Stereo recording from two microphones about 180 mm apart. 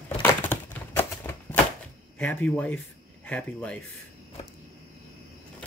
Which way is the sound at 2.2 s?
10° left (ahead or behind).